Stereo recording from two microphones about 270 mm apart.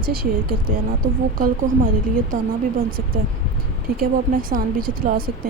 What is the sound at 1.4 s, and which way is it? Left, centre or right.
Speech, right.